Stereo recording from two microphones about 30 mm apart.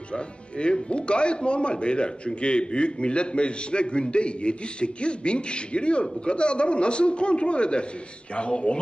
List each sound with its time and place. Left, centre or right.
0.1 s speech: left